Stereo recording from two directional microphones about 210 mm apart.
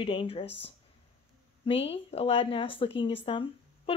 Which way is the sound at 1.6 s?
25° left (ahead or behind).